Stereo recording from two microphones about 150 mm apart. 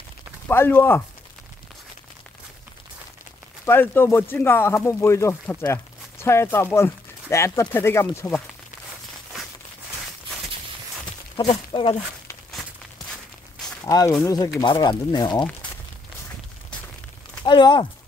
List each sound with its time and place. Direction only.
0.5 s speech: 15° left (ahead or behind)
3.6 s speech: 15° left (ahead or behind)
11.3 s speech: 35° left (ahead or behind)
13.1 s walk: 5° left (ahead or behind)
13.8 s speech: 20° left (ahead or behind)
17.4 s speech: 30° left (ahead or behind)